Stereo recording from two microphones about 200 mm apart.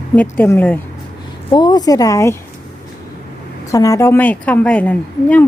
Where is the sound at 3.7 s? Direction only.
15° left (ahead or behind).